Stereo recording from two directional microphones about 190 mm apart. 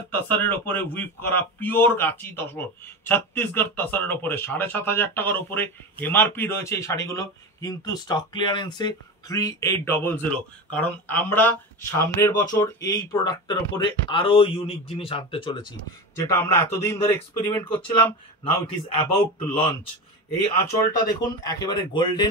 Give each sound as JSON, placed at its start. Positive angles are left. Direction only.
{"t": 0.1, "sound": "a man's voice", "side_deg": 10}
{"t": 16.3, "sound": "a man's voice", "side_deg": 15}
{"t": 18.4, "sound": "speech", "side_deg": 25}
{"t": 20.9, "sound": "speech", "side_deg": 20}